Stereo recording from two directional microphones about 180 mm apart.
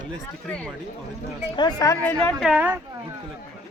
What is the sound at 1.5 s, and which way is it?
Speech, 20° left (ahead or behind).